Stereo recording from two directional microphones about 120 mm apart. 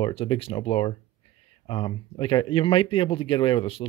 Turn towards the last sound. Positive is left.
turn(degrees=50)  # may be behind; listen again after turning